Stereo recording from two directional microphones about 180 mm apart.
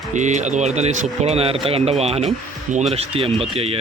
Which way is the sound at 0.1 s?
40° right (ahead or behind).